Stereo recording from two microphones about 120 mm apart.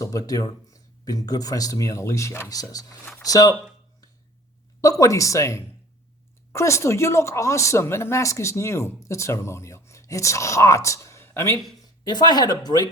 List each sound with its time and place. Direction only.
0.0 s speech: 30° left (ahead or behind)
3.0 s speech: 20° left (ahead or behind)
3.2 s speech: 30° left (ahead or behind)
4.8 s speech: 30° left (ahead or behind)
12.0 s speech: 35° left (ahead or behind)